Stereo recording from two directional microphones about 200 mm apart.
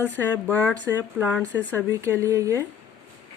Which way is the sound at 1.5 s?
10° left (ahead or behind).